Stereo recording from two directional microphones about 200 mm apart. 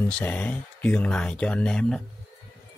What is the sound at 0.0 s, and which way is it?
Speech, 10° left (ahead or behind).